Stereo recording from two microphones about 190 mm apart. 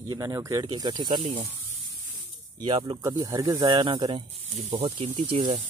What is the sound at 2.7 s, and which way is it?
Speech, 25° right (ahead or behind).